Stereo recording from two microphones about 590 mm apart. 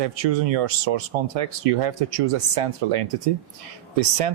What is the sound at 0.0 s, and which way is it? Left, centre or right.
Speech, right.